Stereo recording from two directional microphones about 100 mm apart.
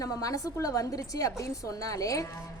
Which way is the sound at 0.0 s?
35° left (ahead or behind).